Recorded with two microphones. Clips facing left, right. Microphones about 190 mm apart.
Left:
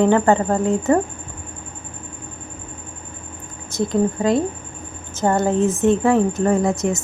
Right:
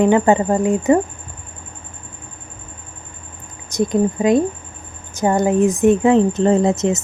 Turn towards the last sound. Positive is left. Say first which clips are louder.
# right 3 dB
turn(degrees=-20)  # may be behind; listen again after turning